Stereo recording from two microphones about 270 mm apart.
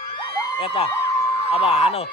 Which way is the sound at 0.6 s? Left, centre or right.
Left.